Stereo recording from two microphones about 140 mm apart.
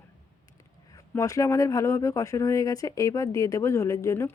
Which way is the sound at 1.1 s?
25° left (ahead or behind).